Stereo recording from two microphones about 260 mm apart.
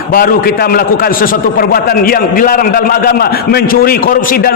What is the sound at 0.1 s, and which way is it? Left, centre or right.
A man's voice, left.